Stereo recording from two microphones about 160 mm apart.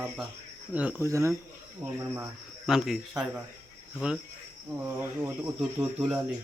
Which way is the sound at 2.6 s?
5° right (ahead or behind).